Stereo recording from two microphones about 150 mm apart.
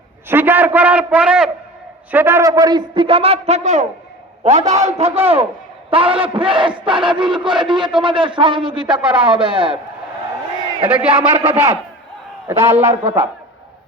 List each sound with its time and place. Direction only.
0.3 s a man's voice: 15° right (ahead or behind); by 8.8 s 35° right (ahead or behind)
8.8 s a man's voice: 5° right (ahead or behind)
9.2 s a man's voice: 35° right (ahead or behind)
10.8 s a man's voice: 10° right (ahead or behind)